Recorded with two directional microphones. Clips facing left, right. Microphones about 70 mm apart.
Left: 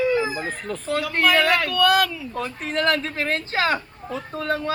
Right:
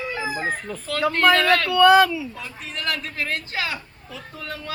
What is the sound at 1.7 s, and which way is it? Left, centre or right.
Speech, right.